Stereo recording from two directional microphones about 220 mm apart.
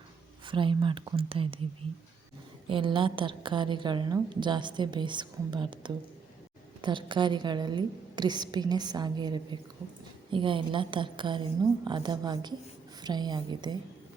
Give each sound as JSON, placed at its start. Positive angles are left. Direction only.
{"t": 0.4, "sound": "a woman's voice", "side_deg": -20}
{"t": 2.6, "sound": "a woman's voice", "side_deg": -25}